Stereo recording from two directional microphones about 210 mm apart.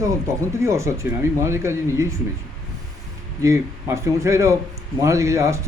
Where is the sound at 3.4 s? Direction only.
15° right (ahead or behind).